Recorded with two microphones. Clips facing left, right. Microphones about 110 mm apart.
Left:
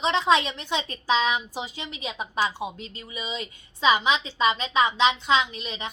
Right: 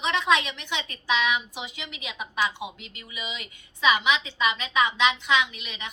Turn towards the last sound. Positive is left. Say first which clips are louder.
# left 2 dB
turn(degrees=35)  # may be behind; listen again after turning